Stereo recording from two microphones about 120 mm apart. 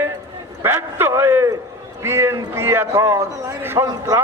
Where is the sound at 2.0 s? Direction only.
20° right (ahead or behind).